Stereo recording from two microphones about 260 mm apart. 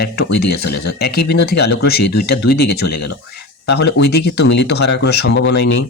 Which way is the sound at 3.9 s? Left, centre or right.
Left.